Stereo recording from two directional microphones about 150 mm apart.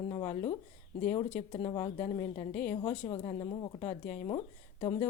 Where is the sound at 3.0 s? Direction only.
35° left (ahead or behind).